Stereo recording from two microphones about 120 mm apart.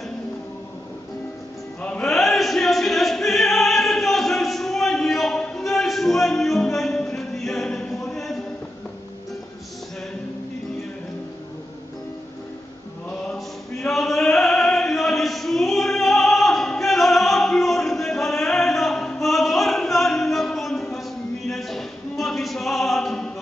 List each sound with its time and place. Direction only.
1.8 s choir: 10° left (ahead or behind)
13.1 s choir: 5° left (ahead or behind)
21.5 s a sound: centre (ahead or behind)